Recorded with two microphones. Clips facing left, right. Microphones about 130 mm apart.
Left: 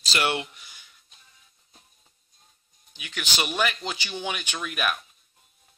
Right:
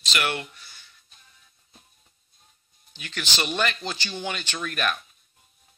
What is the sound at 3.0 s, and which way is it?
Speech, 10° left (ahead or behind).